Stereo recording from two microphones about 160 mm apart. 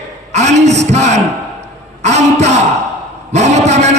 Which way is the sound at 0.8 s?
45° right (ahead or behind).